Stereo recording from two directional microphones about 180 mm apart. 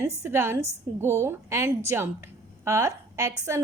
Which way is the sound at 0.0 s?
15° right (ahead or behind).